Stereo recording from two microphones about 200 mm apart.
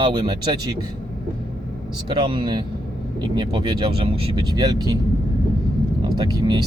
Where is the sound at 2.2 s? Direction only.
25° right (ahead or behind).